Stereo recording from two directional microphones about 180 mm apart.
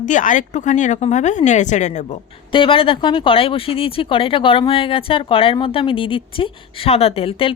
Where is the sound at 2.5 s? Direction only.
30° left (ahead or behind).